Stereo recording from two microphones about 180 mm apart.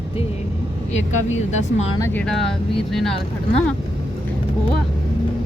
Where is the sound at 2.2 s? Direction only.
Centre (ahead or behind).